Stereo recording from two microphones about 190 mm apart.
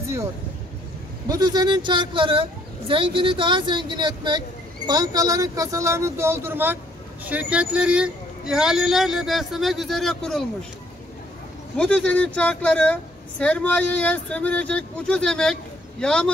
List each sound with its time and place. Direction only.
1.2 s speech: 20° right (ahead or behind); by 10.4 s centre (ahead or behind)
11.7 s speech: 5° left (ahead or behind)